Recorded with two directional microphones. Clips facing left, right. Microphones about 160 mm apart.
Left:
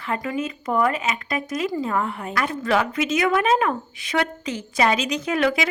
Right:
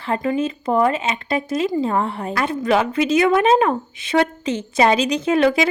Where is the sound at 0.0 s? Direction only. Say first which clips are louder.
Right 5 dB; 30° right (ahead or behind).